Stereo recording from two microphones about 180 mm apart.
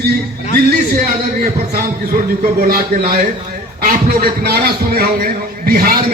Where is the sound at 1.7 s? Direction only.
55° right (ahead or behind).